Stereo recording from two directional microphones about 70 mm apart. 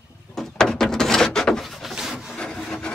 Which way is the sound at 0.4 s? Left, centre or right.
Centre.